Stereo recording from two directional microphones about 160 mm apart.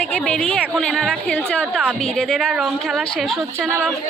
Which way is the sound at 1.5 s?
5° left (ahead or behind).